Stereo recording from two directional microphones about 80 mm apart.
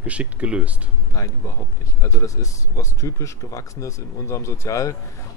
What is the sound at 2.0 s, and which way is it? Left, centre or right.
Speech, left.